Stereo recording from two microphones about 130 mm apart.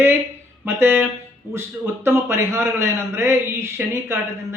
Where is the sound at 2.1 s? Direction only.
20° right (ahead or behind).